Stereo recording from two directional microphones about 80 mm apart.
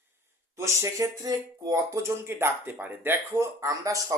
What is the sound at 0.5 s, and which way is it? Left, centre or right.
Speech, right.